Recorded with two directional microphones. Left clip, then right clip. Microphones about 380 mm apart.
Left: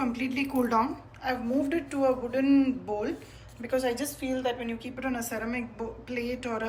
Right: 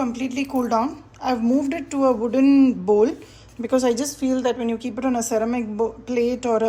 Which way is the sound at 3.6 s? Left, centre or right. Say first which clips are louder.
Right 8 dB; right.